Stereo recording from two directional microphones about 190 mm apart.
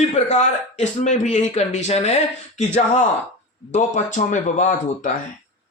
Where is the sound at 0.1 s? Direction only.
35° left (ahead or behind).